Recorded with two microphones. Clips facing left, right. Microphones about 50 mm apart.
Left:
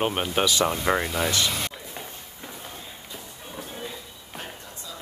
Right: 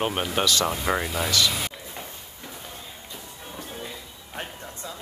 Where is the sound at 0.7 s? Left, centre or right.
Centre.